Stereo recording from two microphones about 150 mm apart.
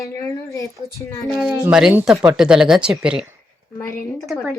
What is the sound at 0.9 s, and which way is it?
Speech, 20° left (ahead or behind).